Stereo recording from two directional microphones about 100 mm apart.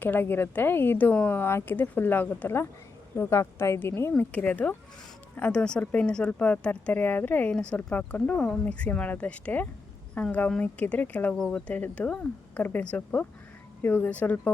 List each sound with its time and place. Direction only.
0.0 s speech: 20° left (ahead or behind)